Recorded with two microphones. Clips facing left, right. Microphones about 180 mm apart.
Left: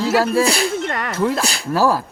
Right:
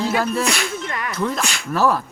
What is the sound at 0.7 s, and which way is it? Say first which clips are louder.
Speech: left 4 dB; 60° left (ahead or behind).